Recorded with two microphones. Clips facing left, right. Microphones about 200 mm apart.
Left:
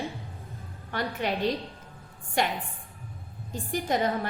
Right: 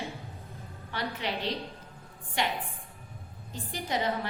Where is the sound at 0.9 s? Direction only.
45° left (ahead or behind).